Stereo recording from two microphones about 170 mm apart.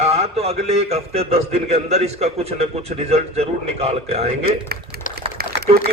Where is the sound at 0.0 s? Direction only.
40° right (ahead or behind).